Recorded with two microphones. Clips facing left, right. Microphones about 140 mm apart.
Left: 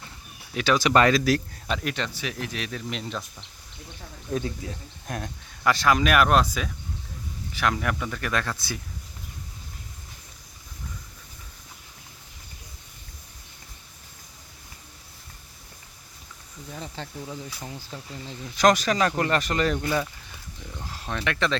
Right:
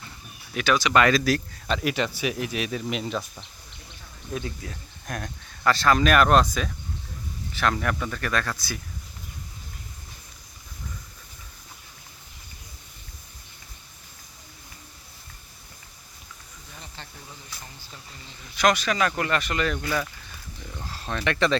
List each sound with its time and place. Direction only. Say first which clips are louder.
0.5 s speech: even; 30° left (ahead or behind)
0.8 s speech: left 1 dB; 45° left (ahead or behind)
1.0 s speech: left 1 dB; 20° left (ahead or behind)
1.8 s speech: right 5 dB; 10° right (ahead or behind)
4.4 s speech: left 3 dB; 25° left (ahead or behind)
5.6 s speech: right 1 dB; 15° left (ahead or behind)
17.2 s speech: left 8 dB; 90° left
18.5 s speech: left 2 dB; 40° left (ahead or behind)
19.8 s speech: left 2 dB; 20° left (ahead or behind)
20.7 s speech: right 1 dB; 10° left (ahead or behind)
21.2 s speech: right 3 dB; centre (ahead or behind)